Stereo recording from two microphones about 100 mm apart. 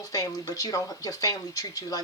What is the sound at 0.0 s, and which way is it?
Speech, 35° left (ahead or behind).